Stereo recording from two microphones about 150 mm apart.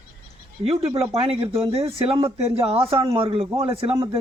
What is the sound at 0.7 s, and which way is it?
Speech, 40° right (ahead or behind).